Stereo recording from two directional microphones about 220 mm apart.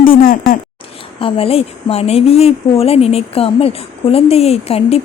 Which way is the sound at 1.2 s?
25° left (ahead or behind).